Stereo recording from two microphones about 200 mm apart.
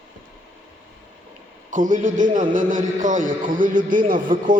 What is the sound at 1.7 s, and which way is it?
Speech, 40° right (ahead or behind).